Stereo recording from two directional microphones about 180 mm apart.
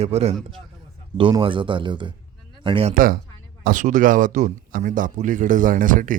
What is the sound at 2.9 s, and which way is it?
Speech, 50° right (ahead or behind).